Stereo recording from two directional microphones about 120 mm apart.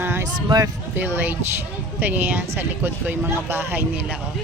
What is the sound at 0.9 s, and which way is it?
Speech, 15° right (ahead or behind).